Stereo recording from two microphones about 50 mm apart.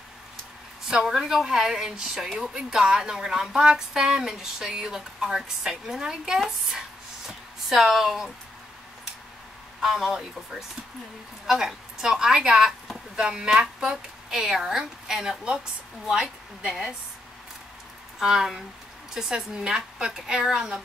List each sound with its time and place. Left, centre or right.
0.8 s a woman's voice: centre
9.8 s a woman's voice: centre
11.4 s a woman's voice: centre
18.2 s a woman's voice: centre